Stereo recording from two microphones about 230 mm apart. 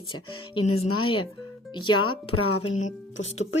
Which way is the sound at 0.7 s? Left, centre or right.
Left.